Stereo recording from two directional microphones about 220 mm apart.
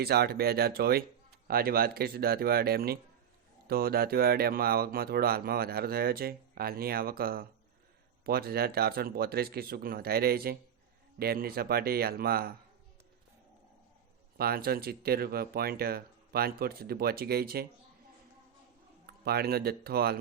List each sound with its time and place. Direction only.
0.0 s speech: 45° right (ahead or behind)
14.3 s speech: 45° right (ahead or behind)
19.0 s speech: 45° right (ahead or behind)